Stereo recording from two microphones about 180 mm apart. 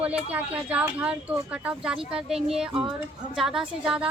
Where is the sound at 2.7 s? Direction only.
30° right (ahead or behind).